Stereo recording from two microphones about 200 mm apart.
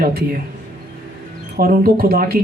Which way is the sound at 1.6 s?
50° right (ahead or behind).